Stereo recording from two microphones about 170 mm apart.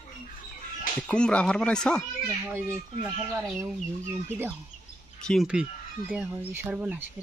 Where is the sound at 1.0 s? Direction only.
5° left (ahead or behind).